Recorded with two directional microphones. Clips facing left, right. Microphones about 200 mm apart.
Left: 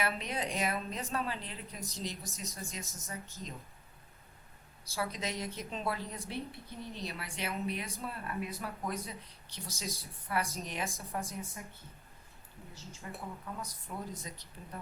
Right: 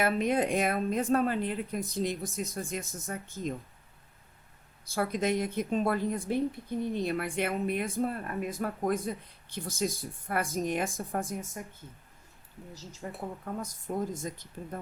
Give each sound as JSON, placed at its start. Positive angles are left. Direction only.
{"t": 0.0, "sound": "a woman's voice", "side_deg": -50}
{"t": 4.9, "sound": "a woman's voice", "side_deg": -55}
{"t": 12.7, "sound": "a woman's voice", "side_deg": -40}